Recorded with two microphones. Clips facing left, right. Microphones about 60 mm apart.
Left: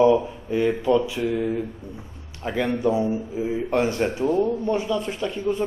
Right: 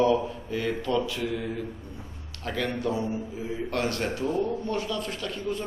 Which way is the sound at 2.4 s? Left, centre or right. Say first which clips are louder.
Left 6 dB; centre.